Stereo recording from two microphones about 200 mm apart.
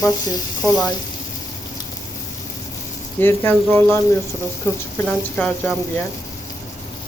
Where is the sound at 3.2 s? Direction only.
10° left (ahead or behind).